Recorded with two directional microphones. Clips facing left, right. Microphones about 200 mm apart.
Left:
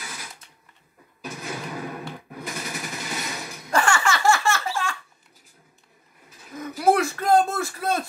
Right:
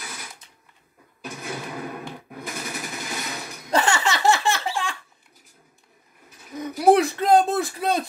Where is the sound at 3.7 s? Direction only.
20° right (ahead or behind).